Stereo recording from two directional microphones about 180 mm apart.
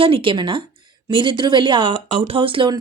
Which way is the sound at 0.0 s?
30° right (ahead or behind).